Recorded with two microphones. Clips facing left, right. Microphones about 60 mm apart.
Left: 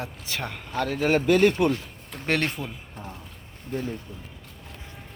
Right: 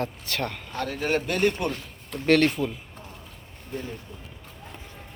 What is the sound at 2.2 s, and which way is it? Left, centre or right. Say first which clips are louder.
Speech: right 6 dB; centre.